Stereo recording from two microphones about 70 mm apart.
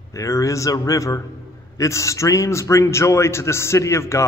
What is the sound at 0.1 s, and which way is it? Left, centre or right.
A man's voice, left.